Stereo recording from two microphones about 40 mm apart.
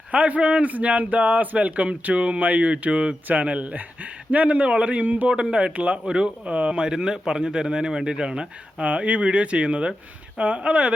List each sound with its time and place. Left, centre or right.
0.1 s speech: right
5.4 s speech: right
6.5 s speech: right
6.7 s speech: right
8.8 s speech: right